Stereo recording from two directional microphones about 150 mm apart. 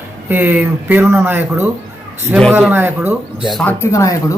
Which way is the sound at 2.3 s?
5° left (ahead or behind).